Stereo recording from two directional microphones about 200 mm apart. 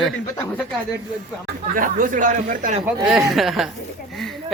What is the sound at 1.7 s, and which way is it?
Speech, 45° right (ahead or behind).